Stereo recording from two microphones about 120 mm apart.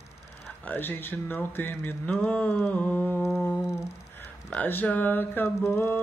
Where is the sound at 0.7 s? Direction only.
15° left (ahead or behind).